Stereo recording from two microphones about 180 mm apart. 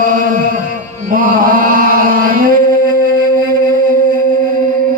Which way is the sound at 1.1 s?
50° right (ahead or behind).